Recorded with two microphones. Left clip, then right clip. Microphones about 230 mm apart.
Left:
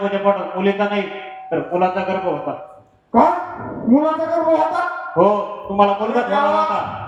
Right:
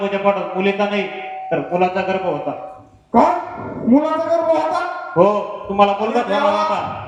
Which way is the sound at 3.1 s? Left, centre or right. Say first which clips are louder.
Even; right.